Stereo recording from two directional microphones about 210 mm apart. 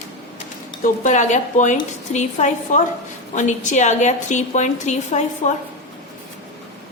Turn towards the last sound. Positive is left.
turn(degrees=35)  # may be behind; listen again after turning